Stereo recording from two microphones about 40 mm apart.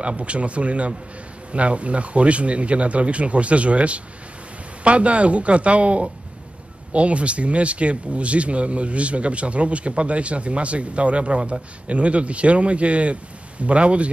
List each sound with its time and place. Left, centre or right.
0.0 s speech: right